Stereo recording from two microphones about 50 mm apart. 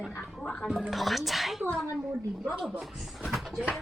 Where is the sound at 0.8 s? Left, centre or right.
Centre.